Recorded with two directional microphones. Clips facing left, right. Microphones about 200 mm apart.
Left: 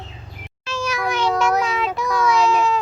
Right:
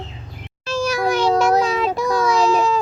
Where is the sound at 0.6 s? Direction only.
35° right (ahead or behind).